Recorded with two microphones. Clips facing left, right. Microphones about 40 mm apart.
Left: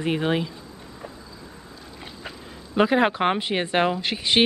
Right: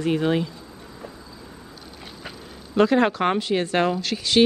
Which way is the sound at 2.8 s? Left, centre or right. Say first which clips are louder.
Right 1 dB; centre.